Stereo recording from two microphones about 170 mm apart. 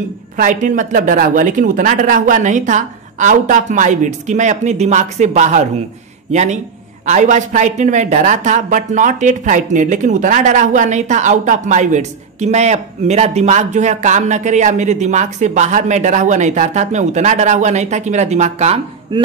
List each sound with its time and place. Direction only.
0.4 s speech: 50° right (ahead or behind)
19.1 s chop: 30° right (ahead or behind)